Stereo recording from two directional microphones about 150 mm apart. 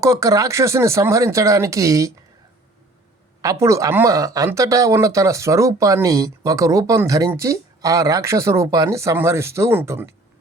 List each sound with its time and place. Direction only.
0.0 s speech: 20° right (ahead or behind)
3.4 s speech: 20° right (ahead or behind)